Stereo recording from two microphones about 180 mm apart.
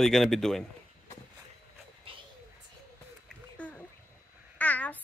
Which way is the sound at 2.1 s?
30° right (ahead or behind).